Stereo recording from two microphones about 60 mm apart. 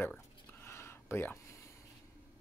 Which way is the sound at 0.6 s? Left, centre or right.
Left.